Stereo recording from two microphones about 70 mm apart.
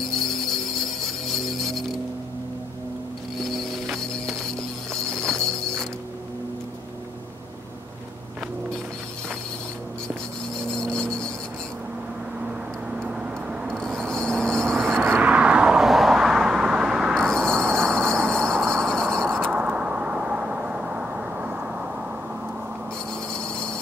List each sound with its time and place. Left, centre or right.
0.3 s music: centre
3.4 s clip-clop: centre
10.8 s a sound: centre
13.7 s vehicle: centre
15.1 s vehicle: centre
17.1 s a sound: centre
17.8 s train: centre
19.5 s vehicle: centre
23.3 s a sound: centre